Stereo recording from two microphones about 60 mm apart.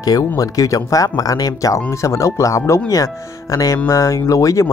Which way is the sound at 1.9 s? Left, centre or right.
Left.